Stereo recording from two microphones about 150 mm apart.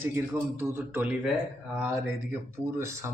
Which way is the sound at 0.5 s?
15° right (ahead or behind).